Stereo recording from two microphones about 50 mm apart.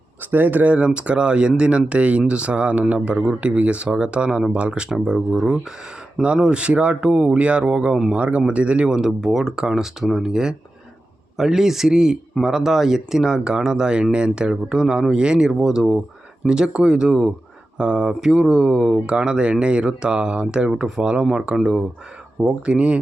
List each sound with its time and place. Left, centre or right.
0.2 s speech: right
0.7 s speech: right; by 10.2 s centre
10.2 s speech: centre